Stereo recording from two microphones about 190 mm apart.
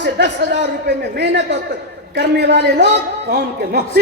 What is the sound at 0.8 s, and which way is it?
A man's voice, 60° right (ahead or behind).